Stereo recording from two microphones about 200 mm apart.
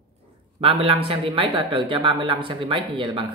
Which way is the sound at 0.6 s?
30° right (ahead or behind).